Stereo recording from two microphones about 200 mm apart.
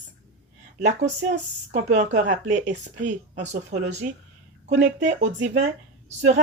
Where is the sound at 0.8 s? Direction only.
40° right (ahead or behind).